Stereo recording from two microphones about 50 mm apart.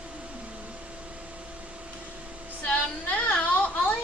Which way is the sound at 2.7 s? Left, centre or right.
Left.